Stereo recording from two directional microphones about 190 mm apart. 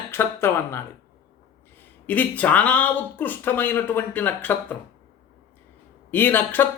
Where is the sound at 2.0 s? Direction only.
10° left (ahead or behind).